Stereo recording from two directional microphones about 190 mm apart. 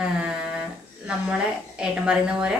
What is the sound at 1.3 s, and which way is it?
A woman's voice, 5° right (ahead or behind).